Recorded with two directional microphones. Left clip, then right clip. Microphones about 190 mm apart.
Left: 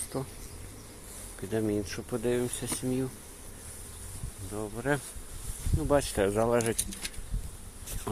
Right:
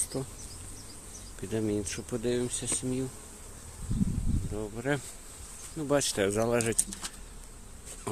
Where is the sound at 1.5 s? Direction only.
25° right (ahead or behind).